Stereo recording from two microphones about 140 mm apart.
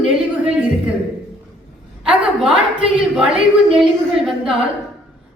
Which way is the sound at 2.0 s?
5° right (ahead or behind).